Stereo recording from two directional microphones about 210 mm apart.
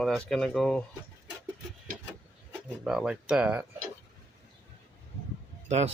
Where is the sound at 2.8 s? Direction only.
5° right (ahead or behind).